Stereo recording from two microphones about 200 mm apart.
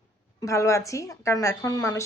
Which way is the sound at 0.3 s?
15° left (ahead or behind).